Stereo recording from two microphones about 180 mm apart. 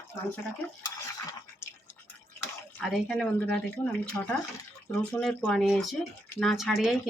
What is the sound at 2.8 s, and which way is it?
Speech, 5° left (ahead or behind).